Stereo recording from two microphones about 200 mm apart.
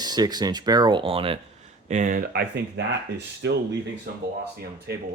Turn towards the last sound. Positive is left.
turn(degrees=-55)  # may be behind; listen again after turning